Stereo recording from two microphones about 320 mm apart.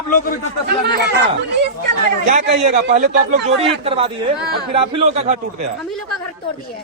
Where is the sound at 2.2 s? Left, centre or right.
Right.